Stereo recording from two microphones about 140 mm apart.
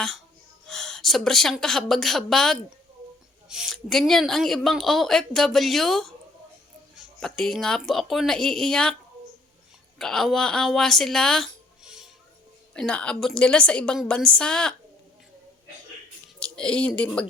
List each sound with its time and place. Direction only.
0.7 s speech: 5° left (ahead or behind)
7.2 s speech: 5° left (ahead or behind)
10.0 s speech: 5° left (ahead or behind)
12.7 s a woman's voice: 5° left (ahead or behind)
16.4 s speech: 5° left (ahead or behind)